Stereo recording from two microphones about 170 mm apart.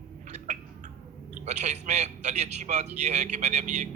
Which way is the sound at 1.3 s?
45° right (ahead or behind).